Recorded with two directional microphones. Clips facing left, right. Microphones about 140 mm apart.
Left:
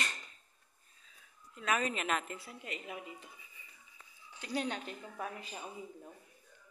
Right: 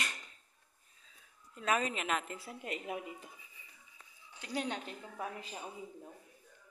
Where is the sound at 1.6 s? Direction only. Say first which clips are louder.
Right 1 dB; 30° right (ahead or behind).